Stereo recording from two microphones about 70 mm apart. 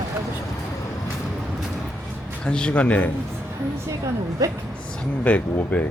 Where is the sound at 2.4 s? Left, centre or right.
Centre.